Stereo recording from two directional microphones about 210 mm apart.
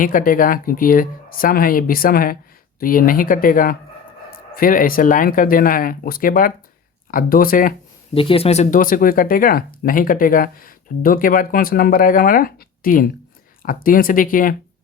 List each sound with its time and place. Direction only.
0.0 s speech: 40° left (ahead or behind)
8.1 s speech: 25° left (ahead or behind); by 14.5 s 40° left (ahead or behind)